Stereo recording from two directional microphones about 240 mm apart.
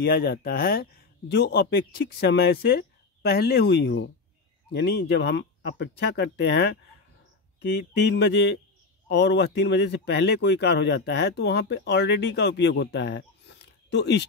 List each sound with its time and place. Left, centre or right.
0.0 s speech: left
8.1 s speech: left